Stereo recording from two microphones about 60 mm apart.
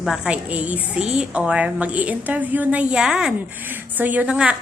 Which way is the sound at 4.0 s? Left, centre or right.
Right.